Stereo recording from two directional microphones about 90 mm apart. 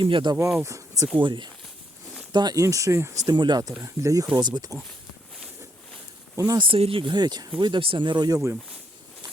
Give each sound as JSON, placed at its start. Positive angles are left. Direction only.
{"t": 0.0, "sound": "speech", "side_deg": -60}
{"t": 0.6, "sound": "speech", "side_deg": -35}
{"t": 1.2, "sound": "speech", "side_deg": -65}
{"t": 2.3, "sound": "speech", "side_deg": -50}
{"t": 3.2, "sound": "speech", "side_deg": -55}
{"t": 3.8, "sound": "speech", "side_deg": -35}
{"t": 4.4, "sound": "speech", "side_deg": -50}
{"t": 6.3, "sound": "speech", "side_deg": -35}
{"t": 6.6, "sound": "speech", "side_deg": -90}
{"t": 7.6, "sound": "speech", "side_deg": -75}